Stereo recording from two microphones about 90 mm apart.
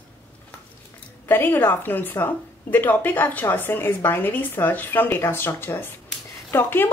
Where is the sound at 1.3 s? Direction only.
25° left (ahead or behind).